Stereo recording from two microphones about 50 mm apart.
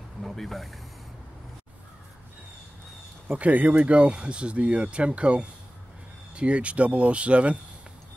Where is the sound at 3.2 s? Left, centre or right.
Right.